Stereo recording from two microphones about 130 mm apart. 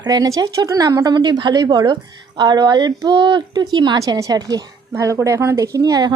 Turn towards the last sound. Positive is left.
turn(degrees=-30)  # may be behind; listen again after turning